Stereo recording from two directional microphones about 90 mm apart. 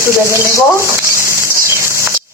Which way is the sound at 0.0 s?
30° right (ahead or behind).